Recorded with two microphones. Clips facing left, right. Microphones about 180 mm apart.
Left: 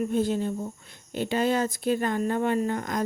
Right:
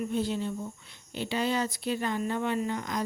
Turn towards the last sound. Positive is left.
turn(degrees=50)  # may be behind; listen again after turning